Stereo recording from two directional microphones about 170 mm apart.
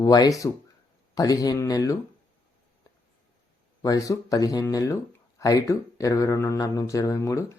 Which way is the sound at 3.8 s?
20° left (ahead or behind).